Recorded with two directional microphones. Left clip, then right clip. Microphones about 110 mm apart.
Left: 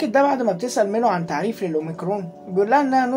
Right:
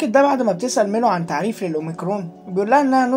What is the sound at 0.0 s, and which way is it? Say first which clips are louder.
Speech: right 2 dB; 40° right (ahead or behind).